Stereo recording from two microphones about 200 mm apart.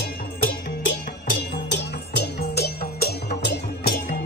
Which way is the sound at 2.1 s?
55° left (ahead or behind).